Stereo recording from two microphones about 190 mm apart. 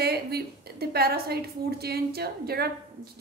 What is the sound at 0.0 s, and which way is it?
A woman's voice, 55° right (ahead or behind).